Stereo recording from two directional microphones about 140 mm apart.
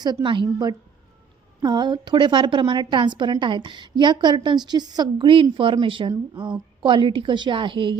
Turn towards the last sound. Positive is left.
turn(degrees=-35)  # may be behind; listen again after turning